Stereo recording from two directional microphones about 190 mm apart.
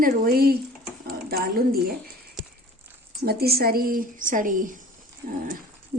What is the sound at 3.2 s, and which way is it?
A woman's voice, 55° right (ahead or behind).